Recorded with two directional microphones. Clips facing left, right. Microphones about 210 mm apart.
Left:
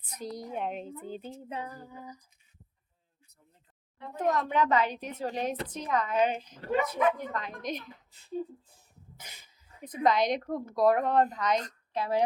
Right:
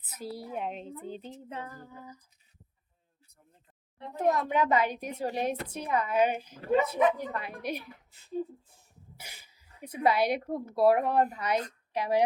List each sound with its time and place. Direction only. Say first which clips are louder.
0.0 s a woman's voice: left 1 dB; 5° right (ahead or behind)
1.5 s a sound: left 2 dB; 15° left (ahead or behind)
4.2 s a woman's voice: right 1 dB; 10° right (ahead or behind)
6.7 s speech: right 3 dB; 25° right (ahead or behind)
6.9 s a woman's voice: right 2 dB; 10° right (ahead or behind)
9.1 s speech: right 2 dB; 10° right (ahead or behind)